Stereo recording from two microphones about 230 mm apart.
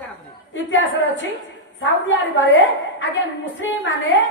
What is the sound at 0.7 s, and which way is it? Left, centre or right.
A woman's voice, left.